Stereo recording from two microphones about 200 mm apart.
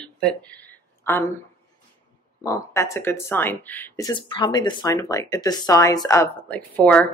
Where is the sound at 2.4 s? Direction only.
15° left (ahead or behind).